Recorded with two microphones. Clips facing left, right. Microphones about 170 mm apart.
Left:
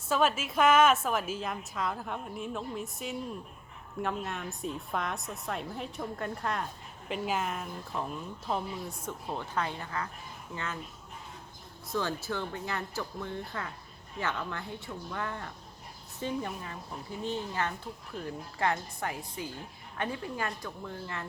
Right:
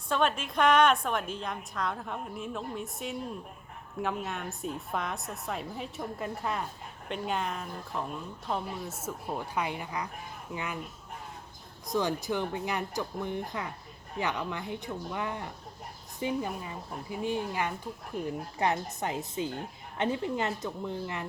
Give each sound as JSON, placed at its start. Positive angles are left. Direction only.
{"t": 0.1, "sound": "a woman's voice", "side_deg": 5}
{"t": 11.9, "sound": "speech", "side_deg": -15}